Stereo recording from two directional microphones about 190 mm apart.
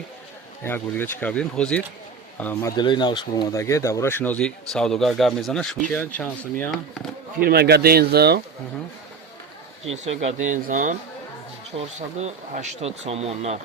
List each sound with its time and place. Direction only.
0.6 s speech: 10° left (ahead or behind)
7.3 s speech: 55° right (ahead or behind)
9.9 s speech: 35° right (ahead or behind)
11.9 s speech: 35° right (ahead or behind)